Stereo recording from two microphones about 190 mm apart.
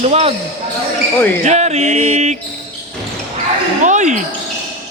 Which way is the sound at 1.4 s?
35° right (ahead or behind).